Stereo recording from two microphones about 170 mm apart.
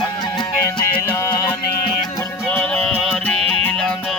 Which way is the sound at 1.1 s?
20° left (ahead or behind).